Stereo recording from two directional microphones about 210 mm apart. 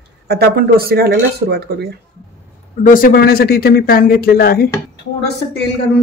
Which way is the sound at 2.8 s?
40° left (ahead or behind).